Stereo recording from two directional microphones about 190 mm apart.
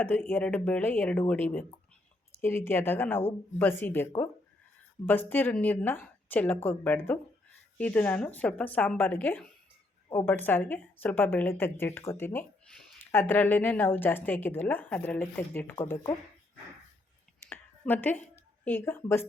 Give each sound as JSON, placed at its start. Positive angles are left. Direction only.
{"t": 0.0, "sound": "speech", "side_deg": 10}
{"t": 17.5, "sound": "a sound", "side_deg": 10}
{"t": 18.3, "sound": "a woman's voice", "side_deg": 10}